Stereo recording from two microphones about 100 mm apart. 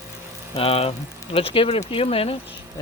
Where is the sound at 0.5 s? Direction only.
75° left (ahead or behind).